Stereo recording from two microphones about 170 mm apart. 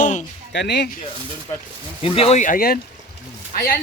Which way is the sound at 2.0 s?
35° left (ahead or behind).